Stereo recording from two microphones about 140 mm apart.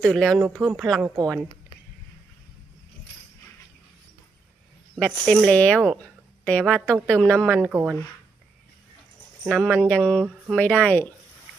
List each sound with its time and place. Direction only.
0.0 s speech: 5° left (ahead or behind)
1.1 s speech: 25° right (ahead or behind)
4.9 s a woman's voice: 5° left (ahead or behind)
7.7 s speech: 15° right (ahead or behind)
9.5 s a woman's voice: 5° left (ahead or behind)